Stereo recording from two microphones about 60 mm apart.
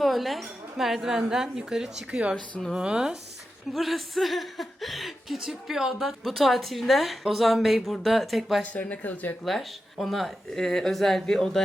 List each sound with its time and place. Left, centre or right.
0.0 s speech: centre
2.0 s speech: right
2.3 s speech: centre
2.7 s speech: centre
3.7 s speech: centre
8.6 s speech: left
9.4 s speech: centre